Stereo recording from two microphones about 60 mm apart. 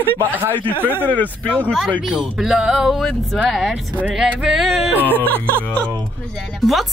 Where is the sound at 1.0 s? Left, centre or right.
Left.